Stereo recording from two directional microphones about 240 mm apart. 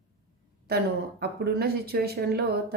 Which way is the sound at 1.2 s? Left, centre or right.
Right.